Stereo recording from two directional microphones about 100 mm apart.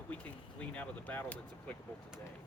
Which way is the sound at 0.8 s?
15° left (ahead or behind).